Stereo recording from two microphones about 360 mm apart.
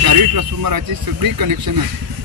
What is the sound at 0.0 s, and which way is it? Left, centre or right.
Speech, right.